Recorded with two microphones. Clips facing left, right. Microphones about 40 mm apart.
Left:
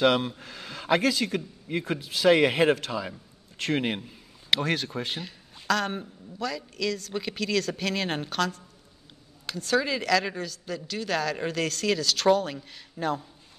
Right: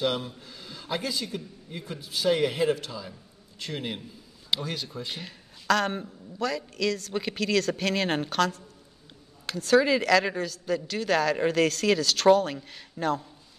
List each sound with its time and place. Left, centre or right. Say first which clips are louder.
0.0 s speech: left 6 dB; left
5.2 s a woman's voice: left 1 dB; centre